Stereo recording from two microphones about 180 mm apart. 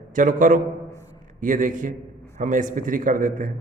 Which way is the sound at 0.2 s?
45° right (ahead or behind).